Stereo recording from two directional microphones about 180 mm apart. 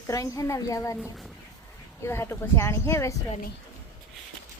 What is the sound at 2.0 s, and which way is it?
A woman's voice, 15° left (ahead or behind).